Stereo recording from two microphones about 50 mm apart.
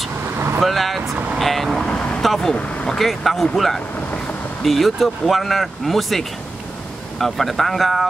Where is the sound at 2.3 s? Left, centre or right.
Centre.